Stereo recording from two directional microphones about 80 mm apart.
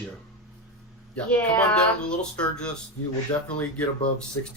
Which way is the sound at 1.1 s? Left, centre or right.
Centre.